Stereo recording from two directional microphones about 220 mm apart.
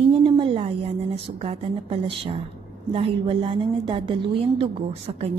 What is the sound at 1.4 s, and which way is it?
A woman's voice, 25° right (ahead or behind).